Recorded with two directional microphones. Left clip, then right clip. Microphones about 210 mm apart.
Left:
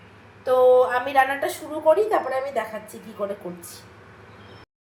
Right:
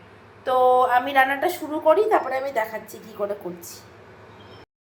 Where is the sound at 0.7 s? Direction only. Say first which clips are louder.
Even; 10° right (ahead or behind).